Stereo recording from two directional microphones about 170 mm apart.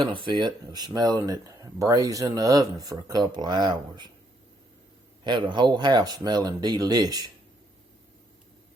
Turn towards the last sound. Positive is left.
turn(degrees=-20)  # may be behind; listen again after turning